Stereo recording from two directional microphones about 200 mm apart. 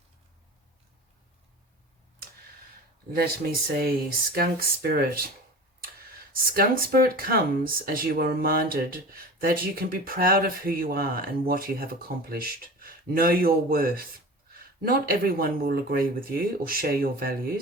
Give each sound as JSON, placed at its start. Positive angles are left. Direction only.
{"t": 3.2, "sound": "speech", "side_deg": -50}